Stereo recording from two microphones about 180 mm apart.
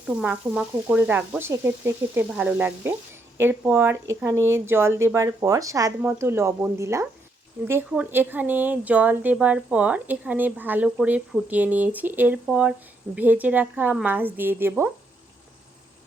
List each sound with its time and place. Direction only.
0.1 s speech: 5° right (ahead or behind)